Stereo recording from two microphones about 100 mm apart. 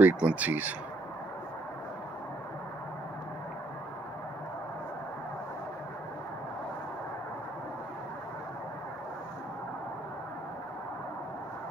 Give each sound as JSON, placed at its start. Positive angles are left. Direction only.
{"t": 0.0, "sound": "speech", "side_deg": -15}